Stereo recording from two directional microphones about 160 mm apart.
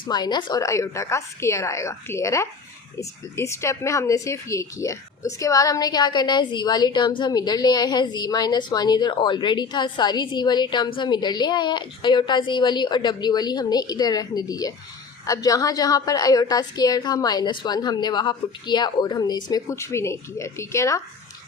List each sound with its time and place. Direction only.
0.0 s a woman's voice: 25° left (ahead or behind)